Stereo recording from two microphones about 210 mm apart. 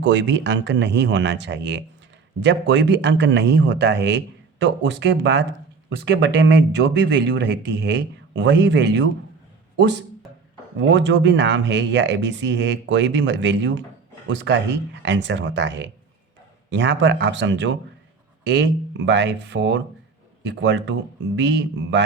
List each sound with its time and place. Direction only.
0.0 s speech: 60° right (ahead or behind)